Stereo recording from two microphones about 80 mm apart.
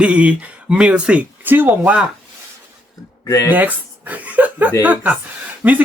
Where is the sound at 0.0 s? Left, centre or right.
Centre.